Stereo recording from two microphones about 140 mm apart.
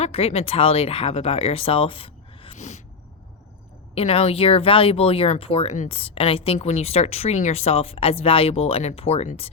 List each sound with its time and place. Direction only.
0.0 s speech: 45° left (ahead or behind)
2.6 s a sound: 55° left (ahead or behind)
3.9 s speech: 45° left (ahead or behind)